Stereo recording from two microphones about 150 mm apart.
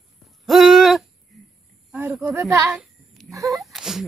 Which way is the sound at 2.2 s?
20° right (ahead or behind).